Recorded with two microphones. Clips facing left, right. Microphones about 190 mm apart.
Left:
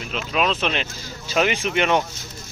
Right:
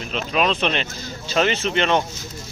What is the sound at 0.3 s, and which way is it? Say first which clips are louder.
Speech: right 1 dB; centre (ahead or behind).